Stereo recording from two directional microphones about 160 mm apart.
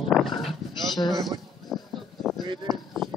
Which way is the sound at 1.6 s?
Centre (ahead or behind).